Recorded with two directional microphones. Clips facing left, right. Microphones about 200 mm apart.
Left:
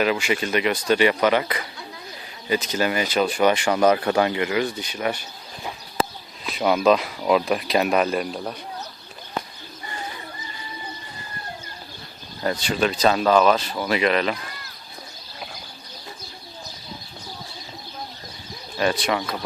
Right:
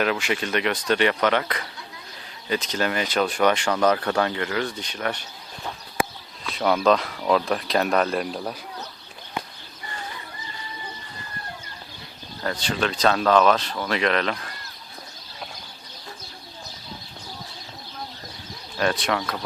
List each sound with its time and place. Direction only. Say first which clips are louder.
0.0 s speech: left 2 dB; centre (ahead or behind)
6.5 s speech: left 2 dB; 10° left (ahead or behind)
12.4 s speech: left 3 dB; 10° left (ahead or behind)
18.8 s speech: left 1 dB; centre (ahead or behind)